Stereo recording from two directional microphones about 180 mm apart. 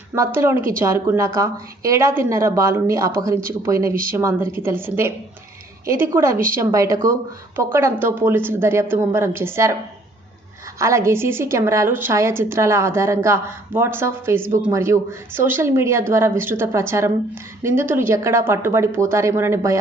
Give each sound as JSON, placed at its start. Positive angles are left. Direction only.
{"t": 0.1, "sound": "a woman's voice", "side_deg": -15}
{"t": 10.8, "sound": "a woman's voice", "side_deg": -15}